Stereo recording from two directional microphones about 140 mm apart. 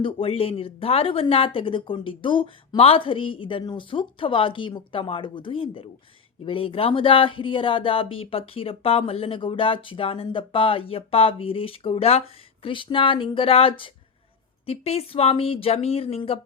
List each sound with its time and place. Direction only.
0.0 s speech: 40° left (ahead or behind)